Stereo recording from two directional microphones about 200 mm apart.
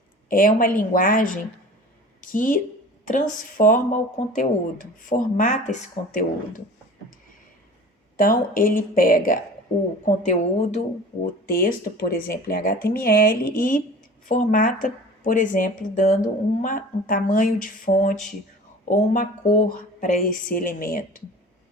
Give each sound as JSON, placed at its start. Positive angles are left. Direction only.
{"t": 0.3, "sound": "speech", "side_deg": 45}
{"t": 8.2, "sound": "speech", "side_deg": 45}
{"t": 11.4, "sound": "speech", "side_deg": 45}